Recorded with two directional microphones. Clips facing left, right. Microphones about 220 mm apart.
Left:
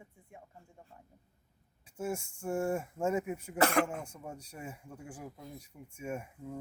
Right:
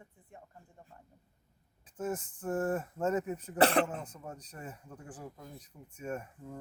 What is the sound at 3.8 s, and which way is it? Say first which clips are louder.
Speech: even; 10° left (ahead or behind).